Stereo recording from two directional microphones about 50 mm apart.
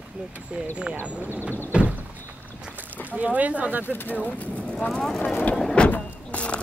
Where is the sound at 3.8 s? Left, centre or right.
Left.